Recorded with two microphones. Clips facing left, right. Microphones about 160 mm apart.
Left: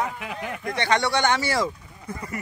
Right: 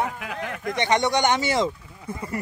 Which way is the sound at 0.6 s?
20° right (ahead or behind).